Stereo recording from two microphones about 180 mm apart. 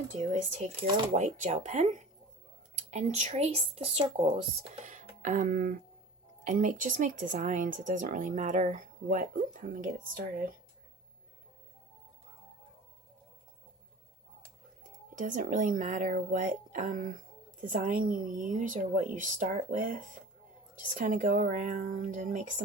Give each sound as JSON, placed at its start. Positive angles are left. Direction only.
{"t": 0.2, "sound": "speech", "side_deg": -40}
{"t": 15.1, "sound": "speech", "side_deg": -45}